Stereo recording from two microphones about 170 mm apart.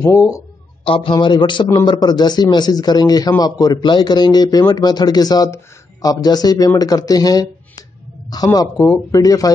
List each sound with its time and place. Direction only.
0.0 s speech: 20° left (ahead or behind)
0.8 s a man's voice: 30° left (ahead or behind)